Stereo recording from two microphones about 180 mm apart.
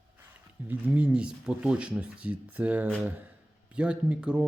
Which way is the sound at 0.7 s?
5° right (ahead or behind).